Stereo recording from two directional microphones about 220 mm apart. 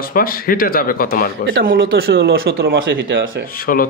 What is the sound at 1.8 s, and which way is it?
Speech, 45° right (ahead or behind).